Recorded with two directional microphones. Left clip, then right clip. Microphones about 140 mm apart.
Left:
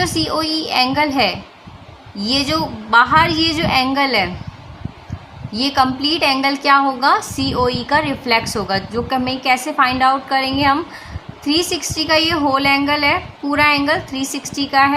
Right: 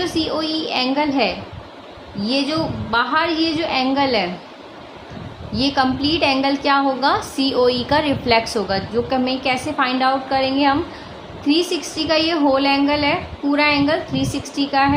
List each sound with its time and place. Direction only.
0.0 s a woman's voice: 45° left (ahead or behind)
5.5 s a woman's voice: 40° left (ahead or behind)